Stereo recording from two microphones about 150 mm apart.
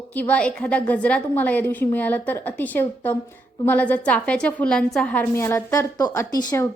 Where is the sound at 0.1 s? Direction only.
10° left (ahead or behind).